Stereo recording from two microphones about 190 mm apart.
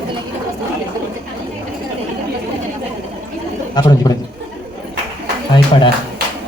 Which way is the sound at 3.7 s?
20° left (ahead or behind).